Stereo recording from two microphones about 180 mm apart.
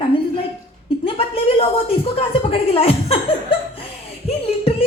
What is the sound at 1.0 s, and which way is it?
Speech, 30° left (ahead or behind).